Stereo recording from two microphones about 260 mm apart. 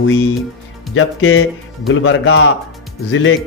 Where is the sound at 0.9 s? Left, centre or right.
Left.